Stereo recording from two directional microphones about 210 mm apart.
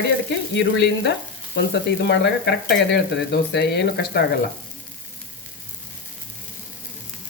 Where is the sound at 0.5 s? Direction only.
55° left (ahead or behind).